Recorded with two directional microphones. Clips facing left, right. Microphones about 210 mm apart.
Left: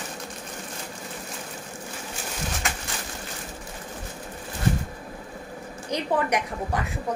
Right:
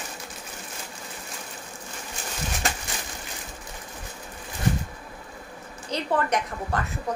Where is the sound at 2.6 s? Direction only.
35° right (ahead or behind).